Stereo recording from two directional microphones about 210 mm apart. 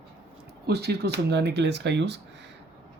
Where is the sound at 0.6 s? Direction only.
50° right (ahead or behind).